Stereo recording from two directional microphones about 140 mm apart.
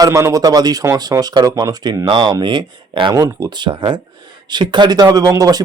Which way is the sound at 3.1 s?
20° right (ahead or behind).